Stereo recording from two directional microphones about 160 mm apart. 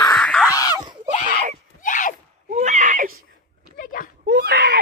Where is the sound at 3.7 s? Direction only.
60° left (ahead or behind).